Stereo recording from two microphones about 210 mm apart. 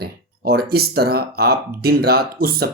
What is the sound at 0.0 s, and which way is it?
Speech, 50° right (ahead or behind).